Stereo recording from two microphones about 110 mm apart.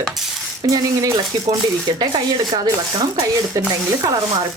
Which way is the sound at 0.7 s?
30° right (ahead or behind).